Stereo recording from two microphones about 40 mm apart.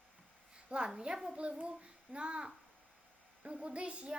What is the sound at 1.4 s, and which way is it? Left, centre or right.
A woman's voice, right.